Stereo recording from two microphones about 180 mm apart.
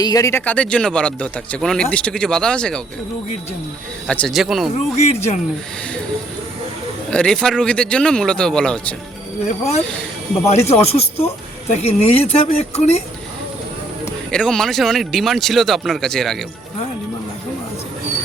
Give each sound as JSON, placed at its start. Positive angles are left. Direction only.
{"t": 0.0, "sound": "speech", "side_deg": 20}
{"t": 4.0, "sound": "speech", "side_deg": 5}
{"t": 4.9, "sound": "speech", "side_deg": 40}
{"t": 7.1, "sound": "speech", "side_deg": 5}
{"t": 10.4, "sound": "speech", "side_deg": 35}
{"t": 14.3, "sound": "speech", "side_deg": 5}